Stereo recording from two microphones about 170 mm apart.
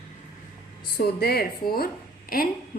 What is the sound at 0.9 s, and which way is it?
Speech, 65° left (ahead or behind).